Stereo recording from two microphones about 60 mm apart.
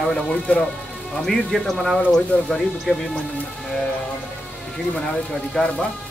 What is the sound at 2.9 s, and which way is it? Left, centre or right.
Speech, centre.